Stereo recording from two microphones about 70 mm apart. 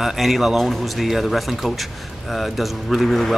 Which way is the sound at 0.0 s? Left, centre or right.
Centre.